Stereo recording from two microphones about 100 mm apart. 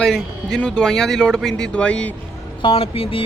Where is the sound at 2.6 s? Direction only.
70° left (ahead or behind).